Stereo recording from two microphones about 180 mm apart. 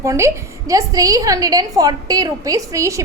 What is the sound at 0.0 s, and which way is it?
A woman's voice, 15° right (ahead or behind).